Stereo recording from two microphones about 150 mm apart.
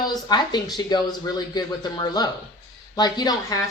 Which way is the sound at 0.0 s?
25° left (ahead or behind).